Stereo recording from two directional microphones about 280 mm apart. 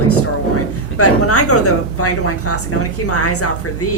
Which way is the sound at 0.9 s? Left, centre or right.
Left.